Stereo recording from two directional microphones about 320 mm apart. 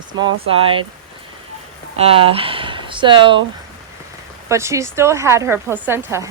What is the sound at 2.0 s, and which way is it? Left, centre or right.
A woman's voice, centre.